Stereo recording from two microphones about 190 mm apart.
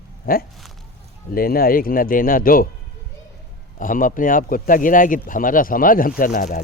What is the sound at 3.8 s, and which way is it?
Speech, 45° left (ahead or behind).